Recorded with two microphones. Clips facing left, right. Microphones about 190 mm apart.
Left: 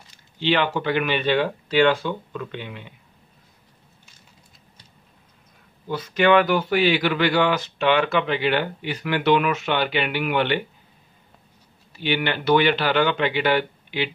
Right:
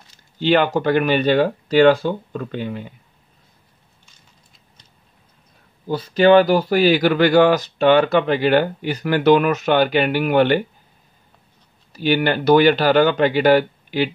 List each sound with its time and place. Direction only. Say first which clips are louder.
0.4 s speech: right 5 dB; 45° right (ahead or behind)
5.9 s speech: right 5 dB; 30° right (ahead or behind)
11.9 s speech: right 6 dB; 40° right (ahead or behind)